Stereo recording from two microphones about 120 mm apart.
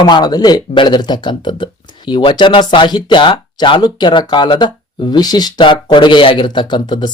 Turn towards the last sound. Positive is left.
turn(degrees=40)  # may be behind; listen again after turning